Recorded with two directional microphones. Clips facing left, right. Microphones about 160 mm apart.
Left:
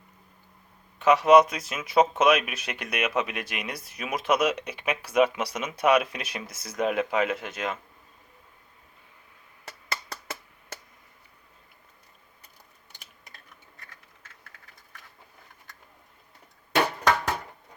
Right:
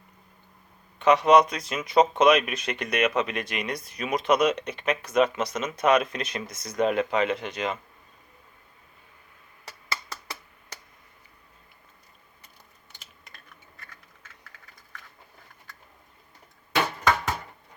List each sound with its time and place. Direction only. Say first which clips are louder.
0.9 s speech: left 1 dB; 5° left (ahead or behind)
9.9 s finger snapping: even; 50° left (ahead or behind)